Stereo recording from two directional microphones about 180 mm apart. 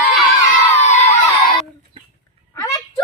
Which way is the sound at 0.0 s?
10° left (ahead or behind).